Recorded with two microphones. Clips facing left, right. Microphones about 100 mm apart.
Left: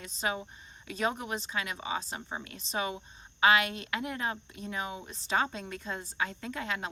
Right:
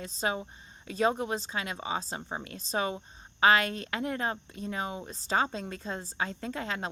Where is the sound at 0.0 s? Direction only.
35° right (ahead or behind).